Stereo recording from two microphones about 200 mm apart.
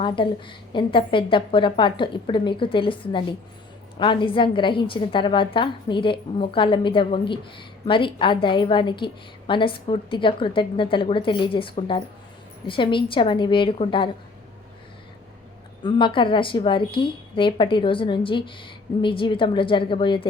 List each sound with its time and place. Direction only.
0.0 s a woman's voice: 25° left (ahead or behind)
15.8 s a woman's voice: 25° left (ahead or behind)